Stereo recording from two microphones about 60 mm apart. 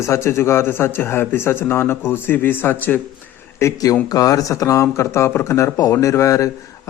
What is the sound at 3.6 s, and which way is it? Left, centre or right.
Speech, left.